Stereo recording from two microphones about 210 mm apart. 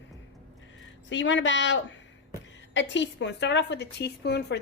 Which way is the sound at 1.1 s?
60° left (ahead or behind).